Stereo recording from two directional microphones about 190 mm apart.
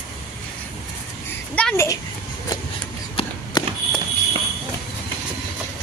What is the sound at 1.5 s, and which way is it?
Speech, 10° left (ahead or behind).